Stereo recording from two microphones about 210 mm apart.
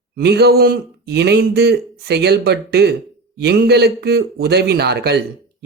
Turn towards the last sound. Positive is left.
turn(degrees=-50)  # may be behind; listen again after turning